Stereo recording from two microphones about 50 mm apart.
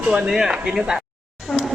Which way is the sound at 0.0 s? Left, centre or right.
Centre.